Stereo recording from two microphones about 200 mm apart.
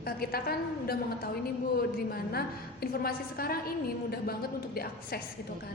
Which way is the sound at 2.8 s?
50° left (ahead or behind).